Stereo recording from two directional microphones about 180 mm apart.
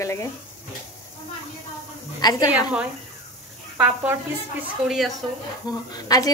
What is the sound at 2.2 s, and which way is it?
Speech, 20° left (ahead or behind).